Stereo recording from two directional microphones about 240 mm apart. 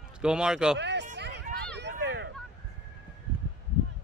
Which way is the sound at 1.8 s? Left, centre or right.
Right.